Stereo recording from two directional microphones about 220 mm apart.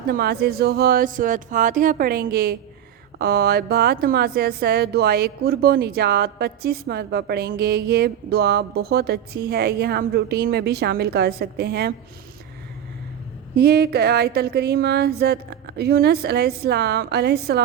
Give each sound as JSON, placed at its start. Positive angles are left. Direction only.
{"t": 0.1, "sound": "a woman's voice", "side_deg": -45}
{"t": 13.6, "sound": "speech", "side_deg": -45}